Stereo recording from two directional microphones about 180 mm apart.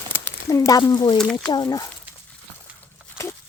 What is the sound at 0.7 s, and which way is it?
Speech, 20° left (ahead or behind).